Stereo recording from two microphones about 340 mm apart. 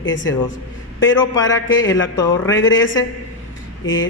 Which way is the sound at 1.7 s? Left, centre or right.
Left.